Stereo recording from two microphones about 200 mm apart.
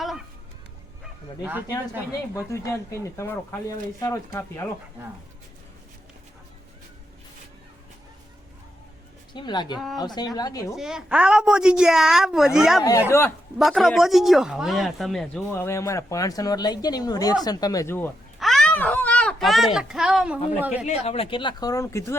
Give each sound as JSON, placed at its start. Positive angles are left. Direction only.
{"t": 1.5, "sound": "speech", "side_deg": -10}
{"t": 2.3, "sound": "speech", "side_deg": 15}
{"t": 9.3, "sound": "speech", "side_deg": 20}
{"t": 10.8, "sound": "a woman's voice", "side_deg": -5}
{"t": 13.1, "sound": "speech", "side_deg": 15}
{"t": 13.6, "sound": "speech", "side_deg": 0}
{"t": 18.3, "sound": "a child's voice", "side_deg": 0}
{"t": 20.8, "sound": "speech", "side_deg": 30}